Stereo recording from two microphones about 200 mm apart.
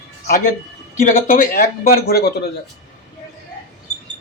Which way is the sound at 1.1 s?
40° left (ahead or behind).